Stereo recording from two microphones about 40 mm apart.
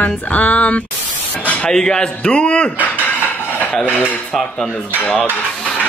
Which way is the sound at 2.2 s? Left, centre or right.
Left.